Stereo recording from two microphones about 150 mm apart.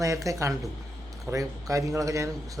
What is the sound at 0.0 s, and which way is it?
A man's voice, 20° right (ahead or behind).